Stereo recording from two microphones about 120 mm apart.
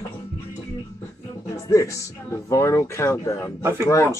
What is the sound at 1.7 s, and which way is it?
Speech, 25° left (ahead or behind).